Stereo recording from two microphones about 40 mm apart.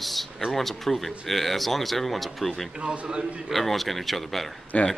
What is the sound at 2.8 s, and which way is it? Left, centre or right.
Speech, right.